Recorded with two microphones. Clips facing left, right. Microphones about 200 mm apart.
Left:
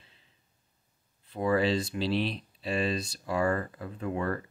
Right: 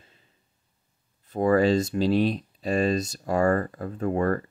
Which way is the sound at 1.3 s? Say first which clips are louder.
Right 6 dB; 45° right (ahead or behind).